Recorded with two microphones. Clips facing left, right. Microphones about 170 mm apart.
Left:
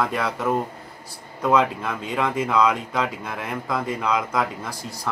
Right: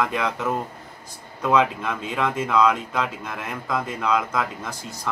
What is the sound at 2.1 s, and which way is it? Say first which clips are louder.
Speech: even; 10° left (ahead or behind).